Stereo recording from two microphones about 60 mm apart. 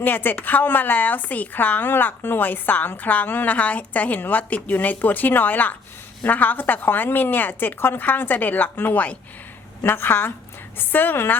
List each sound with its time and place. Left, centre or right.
0.0 s a woman's voice: left